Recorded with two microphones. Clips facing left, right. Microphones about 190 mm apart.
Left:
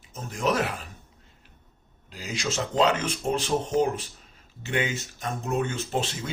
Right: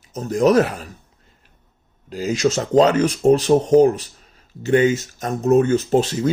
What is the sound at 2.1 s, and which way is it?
Speech, 45° right (ahead or behind).